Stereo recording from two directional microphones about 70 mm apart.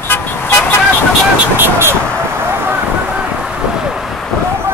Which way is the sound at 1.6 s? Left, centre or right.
Right.